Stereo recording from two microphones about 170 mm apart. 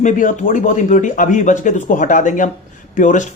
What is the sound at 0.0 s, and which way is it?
Speech, 50° left (ahead or behind).